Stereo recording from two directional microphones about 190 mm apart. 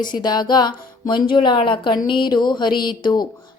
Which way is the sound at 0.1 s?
20° left (ahead or behind).